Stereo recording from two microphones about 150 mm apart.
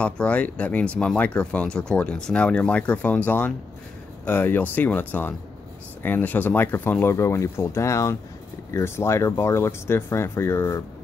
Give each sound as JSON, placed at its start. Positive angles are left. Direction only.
{"t": 0.0, "sound": "speech", "side_deg": 10}